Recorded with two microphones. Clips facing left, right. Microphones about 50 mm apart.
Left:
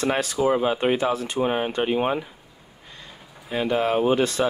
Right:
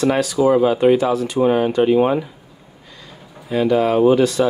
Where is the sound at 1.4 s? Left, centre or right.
Left.